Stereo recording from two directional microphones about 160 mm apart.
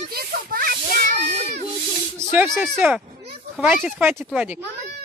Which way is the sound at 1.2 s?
45° right (ahead or behind).